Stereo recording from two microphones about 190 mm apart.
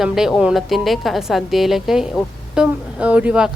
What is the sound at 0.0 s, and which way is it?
A woman's voice, centre (ahead or behind).